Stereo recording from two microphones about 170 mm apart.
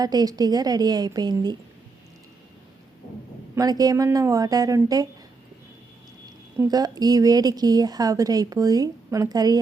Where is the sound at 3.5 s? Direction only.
20° right (ahead or behind).